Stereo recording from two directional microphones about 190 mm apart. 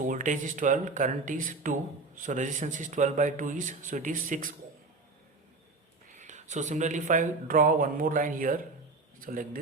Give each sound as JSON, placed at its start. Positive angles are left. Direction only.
{"t": 0.0, "sound": "speech", "side_deg": -40}
{"t": 6.1, "sound": "speech", "side_deg": -40}